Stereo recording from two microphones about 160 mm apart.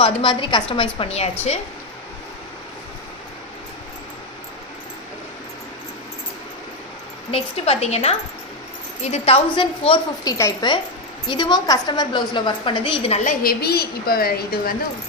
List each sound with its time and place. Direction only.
0.0 s a woman's voice: 35° left (ahead or behind)
7.3 s a woman's voice: 40° left (ahead or behind)
10.2 s a woman's voice: 20° left (ahead or behind)
13.2 s a woman's voice: 70° left (ahead or behind)